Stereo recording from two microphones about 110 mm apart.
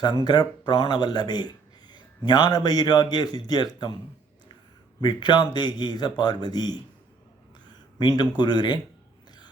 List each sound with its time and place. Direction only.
0.3 s speech: 40° left (ahead or behind)
4.9 s speech: 40° left (ahead or behind)
7.9 s speech: 40° left (ahead or behind)